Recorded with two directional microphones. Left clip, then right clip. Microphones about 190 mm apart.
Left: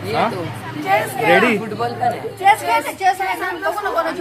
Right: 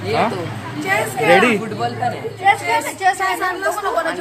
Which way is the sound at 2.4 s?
55° left (ahead or behind).